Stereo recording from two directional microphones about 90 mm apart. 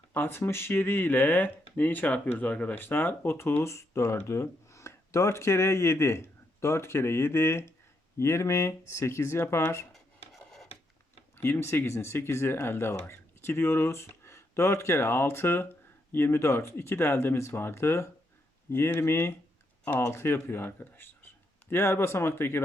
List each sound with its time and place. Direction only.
0.1 s speech: 25° left (ahead or behind)
9.9 s rub: 5° left (ahead or behind)
11.3 s speech: 25° left (ahead or behind)